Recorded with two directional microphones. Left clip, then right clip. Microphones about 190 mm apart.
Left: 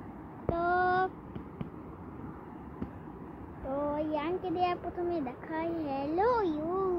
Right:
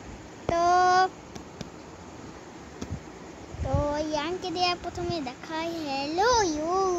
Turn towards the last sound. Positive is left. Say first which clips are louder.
# right 6 dB
turn(degrees=-15)  # may be behind; listen again after turning